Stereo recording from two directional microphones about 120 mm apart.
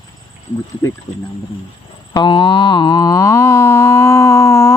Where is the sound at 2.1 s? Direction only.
35° left (ahead or behind).